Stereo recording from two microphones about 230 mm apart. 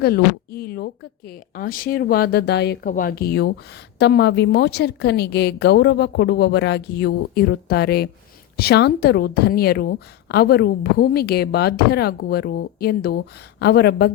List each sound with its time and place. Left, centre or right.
0.0 s speech: left